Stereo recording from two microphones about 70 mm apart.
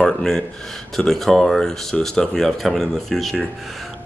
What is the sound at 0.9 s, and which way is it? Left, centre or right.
Speech, centre.